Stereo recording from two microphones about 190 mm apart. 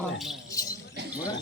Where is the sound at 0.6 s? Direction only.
20° left (ahead or behind).